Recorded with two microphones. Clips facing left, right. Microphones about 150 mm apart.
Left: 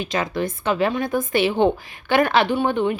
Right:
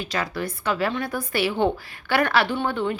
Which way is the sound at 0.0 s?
20° left (ahead or behind).